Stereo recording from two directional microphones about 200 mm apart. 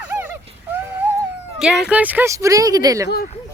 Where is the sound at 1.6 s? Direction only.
5° right (ahead or behind).